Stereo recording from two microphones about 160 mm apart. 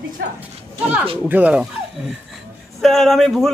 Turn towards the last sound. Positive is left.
turn(degrees=0)  # may be behind; listen again after turning